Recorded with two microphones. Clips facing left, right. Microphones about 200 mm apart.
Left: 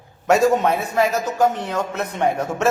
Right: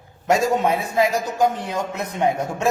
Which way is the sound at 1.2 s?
15° right (ahead or behind).